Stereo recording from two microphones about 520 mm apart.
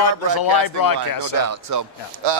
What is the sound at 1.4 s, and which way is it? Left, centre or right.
Speech, right.